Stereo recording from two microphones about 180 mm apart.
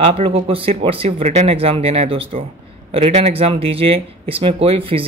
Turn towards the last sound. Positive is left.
turn(degrees=-30)  # may be behind; listen again after turning